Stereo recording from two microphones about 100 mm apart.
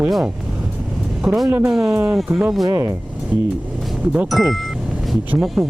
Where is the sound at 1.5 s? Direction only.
20° right (ahead or behind); by 2.9 s 35° right (ahead or behind).